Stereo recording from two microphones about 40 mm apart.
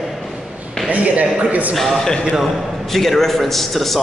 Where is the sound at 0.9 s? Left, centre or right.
Right.